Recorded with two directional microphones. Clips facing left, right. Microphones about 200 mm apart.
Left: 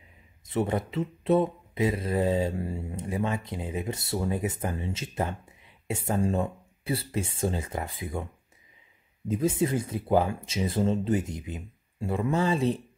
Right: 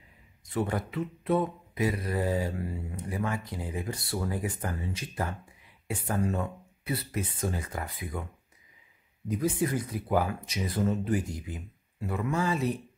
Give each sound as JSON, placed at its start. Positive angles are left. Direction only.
{"t": 0.5, "sound": "speech", "side_deg": 25}
{"t": 9.3, "sound": "speech", "side_deg": 25}